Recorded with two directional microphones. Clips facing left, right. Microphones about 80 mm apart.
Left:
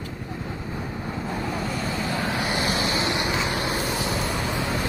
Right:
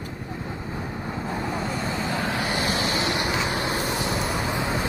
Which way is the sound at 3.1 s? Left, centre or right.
Centre.